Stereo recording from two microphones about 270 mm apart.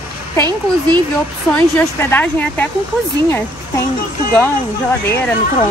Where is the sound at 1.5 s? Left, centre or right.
Centre.